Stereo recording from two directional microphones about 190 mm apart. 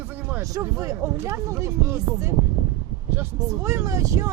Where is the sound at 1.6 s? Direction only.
15° right (ahead or behind).